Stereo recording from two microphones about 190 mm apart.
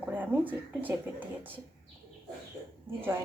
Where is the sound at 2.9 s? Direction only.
15° right (ahead or behind).